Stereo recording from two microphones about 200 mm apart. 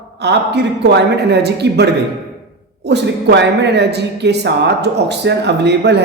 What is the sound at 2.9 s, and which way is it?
Speech, 60° right (ahead or behind).